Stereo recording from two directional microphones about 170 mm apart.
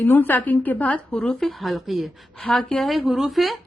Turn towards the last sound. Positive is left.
turn(degrees=0)  # may be behind; listen again after turning